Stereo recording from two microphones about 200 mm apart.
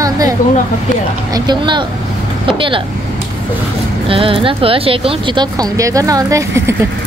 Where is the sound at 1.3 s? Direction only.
20° right (ahead or behind).